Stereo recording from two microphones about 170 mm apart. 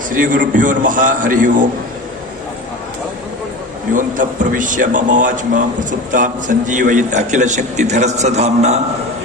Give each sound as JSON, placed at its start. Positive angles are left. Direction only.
{"t": 0.1, "sound": "a man's voice", "side_deg": -50}
{"t": 3.9, "sound": "a man's voice", "side_deg": -50}